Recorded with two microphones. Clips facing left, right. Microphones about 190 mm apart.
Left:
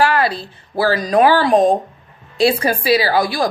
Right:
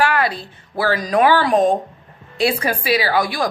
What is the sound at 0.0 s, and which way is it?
A woman's voice, 35° left (ahead or behind).